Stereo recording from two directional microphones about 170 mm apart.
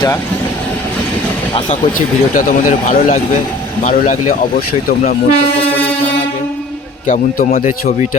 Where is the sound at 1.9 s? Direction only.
50° left (ahead or behind).